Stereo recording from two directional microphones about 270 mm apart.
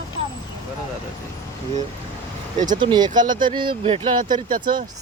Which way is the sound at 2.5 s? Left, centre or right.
Right.